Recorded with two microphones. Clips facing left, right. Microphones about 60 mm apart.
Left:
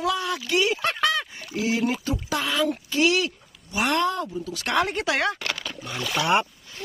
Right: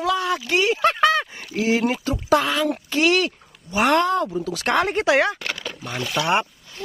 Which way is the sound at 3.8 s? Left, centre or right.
Right.